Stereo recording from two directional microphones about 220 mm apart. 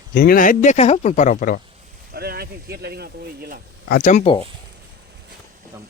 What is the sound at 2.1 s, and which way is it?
Speech, 45° right (ahead or behind).